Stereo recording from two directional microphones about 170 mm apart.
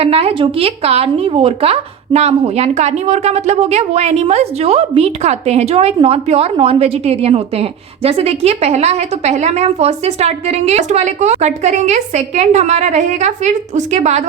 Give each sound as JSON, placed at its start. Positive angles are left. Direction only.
{"t": 0.0, "sound": "a woman's voice", "side_deg": -35}